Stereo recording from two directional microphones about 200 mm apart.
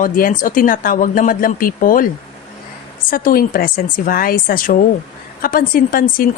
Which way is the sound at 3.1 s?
45° left (ahead or behind).